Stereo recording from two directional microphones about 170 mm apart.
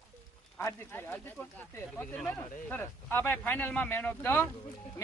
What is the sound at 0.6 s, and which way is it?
Speech, 15° left (ahead or behind).